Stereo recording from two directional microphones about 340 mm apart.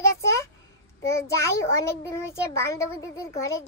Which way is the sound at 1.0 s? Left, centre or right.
Centre.